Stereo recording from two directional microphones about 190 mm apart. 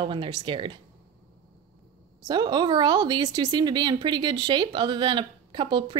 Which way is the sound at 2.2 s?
25° right (ahead or behind).